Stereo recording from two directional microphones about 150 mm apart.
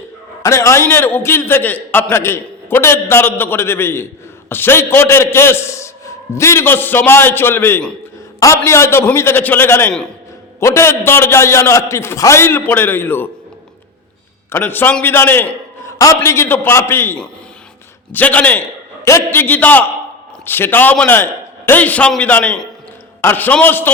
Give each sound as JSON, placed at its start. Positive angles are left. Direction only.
{"t": 0.4, "sound": "a man's voice", "side_deg": 20}
{"t": 14.5, "sound": "a man's voice", "side_deg": 15}